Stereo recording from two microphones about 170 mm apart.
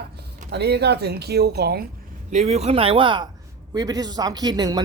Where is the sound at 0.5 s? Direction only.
75° right (ahead or behind).